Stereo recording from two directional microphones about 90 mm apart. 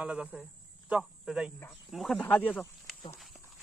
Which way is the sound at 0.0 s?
10° right (ahead or behind).